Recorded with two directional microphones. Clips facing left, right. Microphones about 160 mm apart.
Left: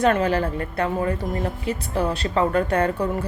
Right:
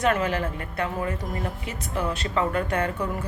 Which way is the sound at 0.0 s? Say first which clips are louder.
Left 4 dB; 35° left (ahead or behind).